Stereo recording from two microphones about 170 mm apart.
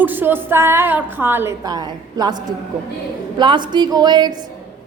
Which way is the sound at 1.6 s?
25° right (ahead or behind).